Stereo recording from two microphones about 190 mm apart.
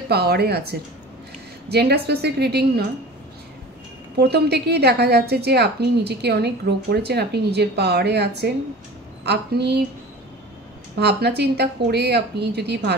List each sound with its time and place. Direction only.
0.1 s a woman's voice: 55° right (ahead or behind)
4.2 s a woman's voice: 60° right (ahead or behind)
11.0 s a woman's voice: 60° right (ahead or behind)